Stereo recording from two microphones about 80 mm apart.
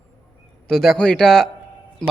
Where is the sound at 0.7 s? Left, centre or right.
Centre.